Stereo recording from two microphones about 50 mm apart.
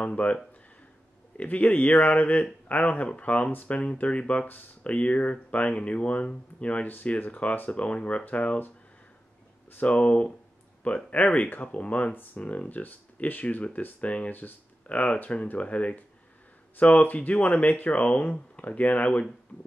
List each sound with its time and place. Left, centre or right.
0.0 s speech: left
1.4 s speech: left
6.9 s speech: left
9.8 s speech: left